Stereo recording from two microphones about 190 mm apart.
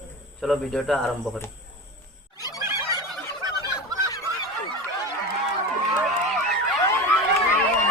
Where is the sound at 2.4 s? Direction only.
20° left (ahead or behind).